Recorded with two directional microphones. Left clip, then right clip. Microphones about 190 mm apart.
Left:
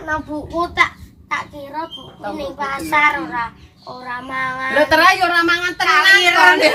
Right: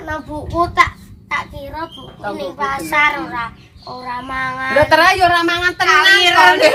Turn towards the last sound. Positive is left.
turn(degrees=-10)  # may be behind; listen again after turning